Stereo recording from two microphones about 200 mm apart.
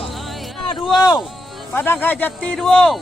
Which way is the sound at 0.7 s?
20° left (ahead or behind).